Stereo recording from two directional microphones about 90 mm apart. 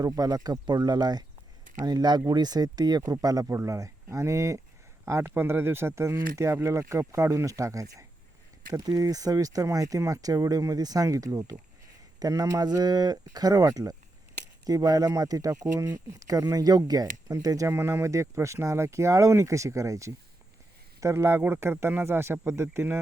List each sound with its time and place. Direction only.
0.0 s speech: 45° right (ahead or behind)
5.2 s speech: 20° right (ahead or behind); by 17.7 s 40° right (ahead or behind)
17.7 s speech: 30° right (ahead or behind)